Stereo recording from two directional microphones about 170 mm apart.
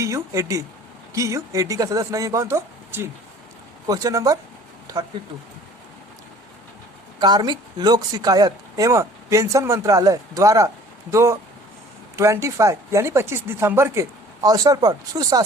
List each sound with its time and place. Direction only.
0.0 s speech: 15° right (ahead or behind)
7.2 s speech: 25° right (ahead or behind)